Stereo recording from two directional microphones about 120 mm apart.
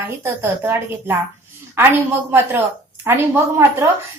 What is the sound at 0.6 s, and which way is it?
A woman's voice, 20° right (ahead or behind).